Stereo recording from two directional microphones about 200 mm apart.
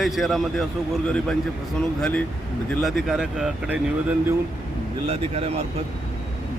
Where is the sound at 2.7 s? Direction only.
Centre (ahead or behind).